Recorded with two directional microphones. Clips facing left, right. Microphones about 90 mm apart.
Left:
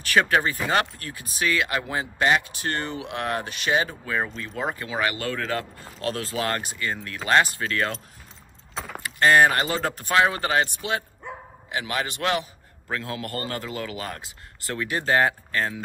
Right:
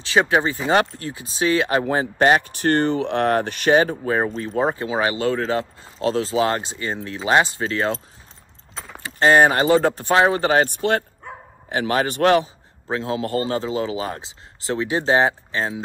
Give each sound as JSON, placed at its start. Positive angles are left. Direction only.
{"t": 0.0, "sound": "speech", "side_deg": -20}
{"t": 8.7, "sound": "speech", "side_deg": 5}
{"t": 9.0, "sound": "speech", "side_deg": -25}
{"t": 10.6, "sound": "speech", "side_deg": -55}
{"t": 11.7, "sound": "a man's voice", "side_deg": -40}
{"t": 12.8, "sound": "speech", "side_deg": -25}